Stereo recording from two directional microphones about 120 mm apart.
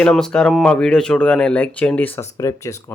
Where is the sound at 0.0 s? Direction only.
5° left (ahead or behind).